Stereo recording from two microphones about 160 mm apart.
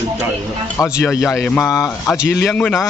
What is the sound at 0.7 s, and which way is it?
Speech, 20° left (ahead or behind).